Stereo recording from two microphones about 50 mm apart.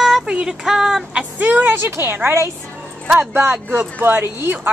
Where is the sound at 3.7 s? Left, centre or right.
Right.